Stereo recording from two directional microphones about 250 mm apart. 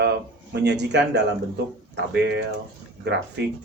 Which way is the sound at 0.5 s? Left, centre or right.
Right.